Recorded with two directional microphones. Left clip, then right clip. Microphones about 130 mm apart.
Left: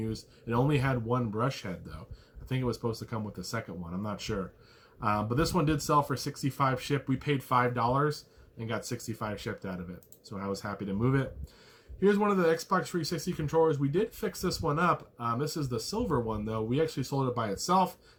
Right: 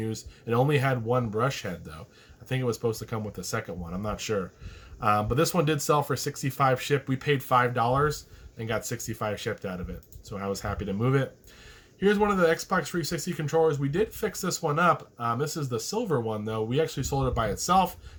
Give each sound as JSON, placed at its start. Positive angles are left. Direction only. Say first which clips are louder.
{"t": 0.0, "sound": "speech", "louder": "right 4 dB", "side_deg": -25}